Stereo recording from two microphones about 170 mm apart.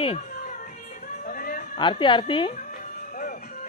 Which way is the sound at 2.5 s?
50° left (ahead or behind).